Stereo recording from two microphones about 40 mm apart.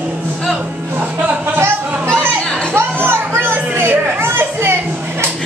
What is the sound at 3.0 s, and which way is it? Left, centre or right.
Music, right.